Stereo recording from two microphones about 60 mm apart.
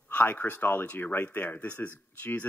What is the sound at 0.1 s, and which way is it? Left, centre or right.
Speech, left.